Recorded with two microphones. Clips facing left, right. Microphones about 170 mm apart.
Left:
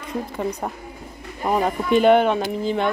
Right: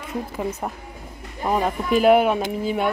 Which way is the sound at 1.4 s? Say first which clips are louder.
Left 1 dB; centre (ahead or behind).